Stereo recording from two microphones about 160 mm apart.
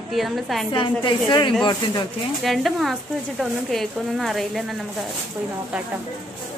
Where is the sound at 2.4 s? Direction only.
Centre (ahead or behind).